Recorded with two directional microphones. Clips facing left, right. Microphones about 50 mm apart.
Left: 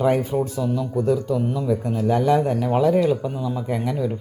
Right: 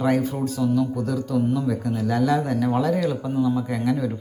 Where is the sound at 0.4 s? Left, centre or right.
Left.